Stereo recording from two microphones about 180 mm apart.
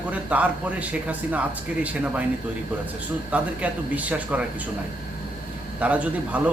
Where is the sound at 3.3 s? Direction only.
10° right (ahead or behind).